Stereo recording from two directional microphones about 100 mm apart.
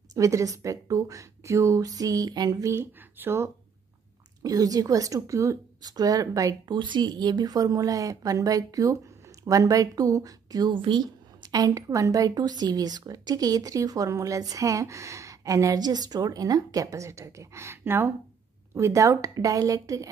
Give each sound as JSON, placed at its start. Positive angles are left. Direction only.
{"t": 0.1, "sound": "a woman's voice", "side_deg": -30}
{"t": 2.7, "sound": "speech", "side_deg": -25}
{"t": 4.4, "sound": "a woman's voice", "side_deg": -35}
{"t": 6.7, "sound": "a woman's voice", "side_deg": -50}
{"t": 10.7, "sound": "a woman's voice", "side_deg": -55}